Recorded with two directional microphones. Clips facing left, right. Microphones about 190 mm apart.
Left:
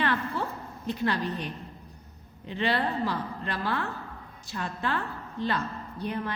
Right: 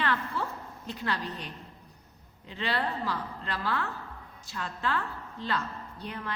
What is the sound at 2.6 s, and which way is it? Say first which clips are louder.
A woman's voice: left 4 dB; 20° left (ahead or behind).